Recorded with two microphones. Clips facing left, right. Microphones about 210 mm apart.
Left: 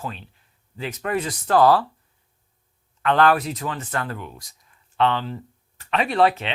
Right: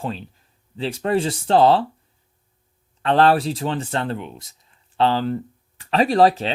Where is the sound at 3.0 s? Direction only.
30° right (ahead or behind).